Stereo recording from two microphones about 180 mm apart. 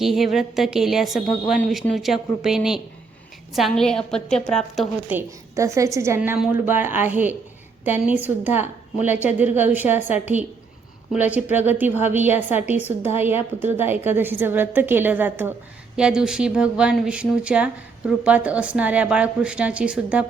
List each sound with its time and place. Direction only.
0.0 s speech: centre (ahead or behind)
5.1 s a woman's voice: 15° right (ahead or behind)